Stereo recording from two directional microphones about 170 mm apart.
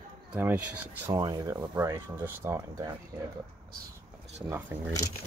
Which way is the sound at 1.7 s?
15° right (ahead or behind).